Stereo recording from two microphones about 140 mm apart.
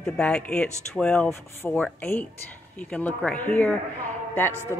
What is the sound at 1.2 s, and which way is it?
A woman's voice, 20° left (ahead or behind).